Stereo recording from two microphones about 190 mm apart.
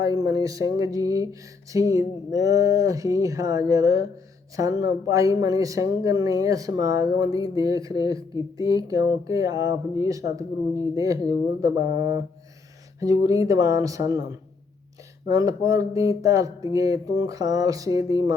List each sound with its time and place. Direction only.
0.0 s speech: 20° right (ahead or behind)
15.3 s speech: 20° right (ahead or behind)